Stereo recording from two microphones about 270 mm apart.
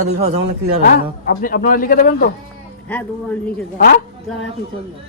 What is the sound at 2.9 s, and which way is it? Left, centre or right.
Speech, centre.